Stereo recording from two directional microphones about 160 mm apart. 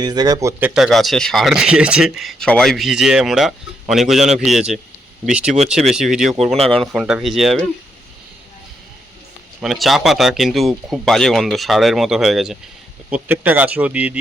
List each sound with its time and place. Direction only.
0.0 s speech: 25° right (ahead or behind)
0.7 s speech: centre (ahead or behind)
6.5 s speech: 40° right (ahead or behind)
6.7 s speech: centre (ahead or behind)
9.6 s speech: centre (ahead or behind)